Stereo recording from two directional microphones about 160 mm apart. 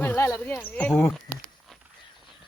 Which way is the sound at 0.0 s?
15° left (ahead or behind).